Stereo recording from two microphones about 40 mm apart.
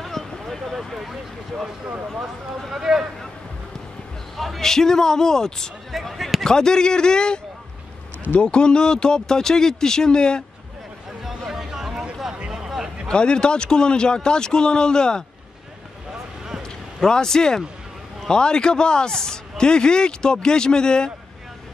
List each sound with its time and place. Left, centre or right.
0.0 s a sound: centre
2.7 s speech: centre
4.6 s a man's voice: centre
5.9 s speech: centre
6.4 s speech: centre
8.4 s speech: left
11.2 s a sound: centre
13.1 s speech: left
16.6 s a sound: centre
18.3 s speech: left